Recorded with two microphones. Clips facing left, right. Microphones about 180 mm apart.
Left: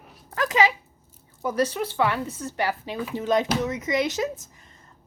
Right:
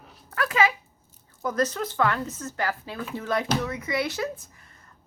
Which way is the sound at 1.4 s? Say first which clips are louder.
Left 2 dB; 10° left (ahead or behind).